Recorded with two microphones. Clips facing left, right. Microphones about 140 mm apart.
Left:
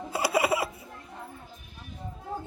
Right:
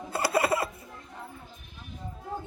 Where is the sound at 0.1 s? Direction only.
10° left (ahead or behind).